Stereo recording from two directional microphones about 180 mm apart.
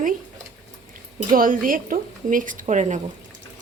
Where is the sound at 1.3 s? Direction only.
50° right (ahead or behind).